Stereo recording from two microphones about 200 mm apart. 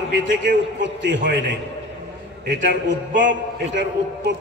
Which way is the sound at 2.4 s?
65° right (ahead or behind).